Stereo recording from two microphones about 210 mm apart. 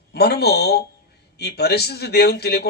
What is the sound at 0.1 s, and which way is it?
A man's voice, 50° left (ahead or behind).